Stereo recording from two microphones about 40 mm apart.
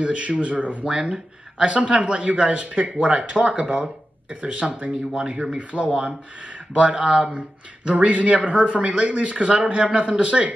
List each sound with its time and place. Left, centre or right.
0.0 s speech: right
0.8 s speech: right
5.6 s speech: right
5.9 s speech: right
6.7 s speech: right